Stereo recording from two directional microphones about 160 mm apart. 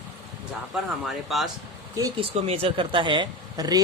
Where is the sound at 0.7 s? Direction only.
5° right (ahead or behind).